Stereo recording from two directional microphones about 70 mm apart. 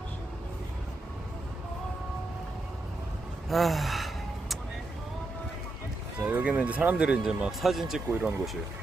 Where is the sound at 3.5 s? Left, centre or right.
Centre.